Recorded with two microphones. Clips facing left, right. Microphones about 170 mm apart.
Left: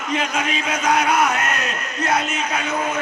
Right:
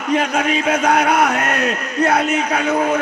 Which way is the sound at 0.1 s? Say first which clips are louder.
Right 6 dB; 60° right (ahead or behind).